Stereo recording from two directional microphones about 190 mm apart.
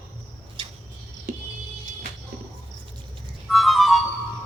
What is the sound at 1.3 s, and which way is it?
Music, 45° right (ahead or behind).